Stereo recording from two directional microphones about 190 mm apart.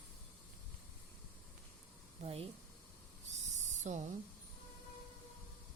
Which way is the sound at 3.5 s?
40° right (ahead or behind).